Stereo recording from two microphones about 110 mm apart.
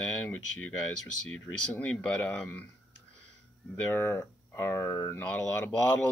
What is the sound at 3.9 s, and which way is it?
Speech, 20° left (ahead or behind).